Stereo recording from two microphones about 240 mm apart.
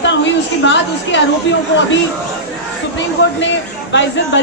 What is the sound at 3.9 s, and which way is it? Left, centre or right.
Speech, left.